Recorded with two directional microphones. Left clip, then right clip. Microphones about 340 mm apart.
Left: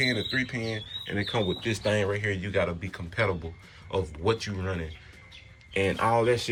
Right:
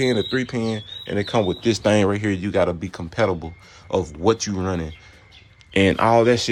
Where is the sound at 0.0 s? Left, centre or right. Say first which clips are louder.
Right 6 dB; right.